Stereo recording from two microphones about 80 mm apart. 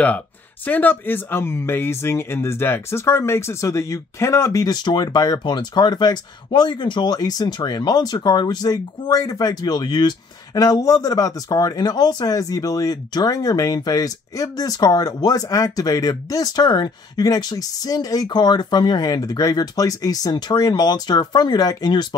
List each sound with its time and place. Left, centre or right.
0.7 s speech: left
4.6 s speech: left
7.1 s speech: left